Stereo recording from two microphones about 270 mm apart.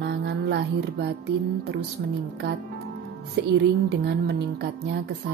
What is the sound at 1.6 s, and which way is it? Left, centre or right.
A woman's voice, right.